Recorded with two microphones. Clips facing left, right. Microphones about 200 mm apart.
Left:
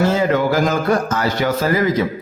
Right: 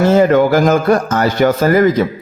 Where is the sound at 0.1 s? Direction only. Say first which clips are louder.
Right 7 dB; 55° right (ahead or behind).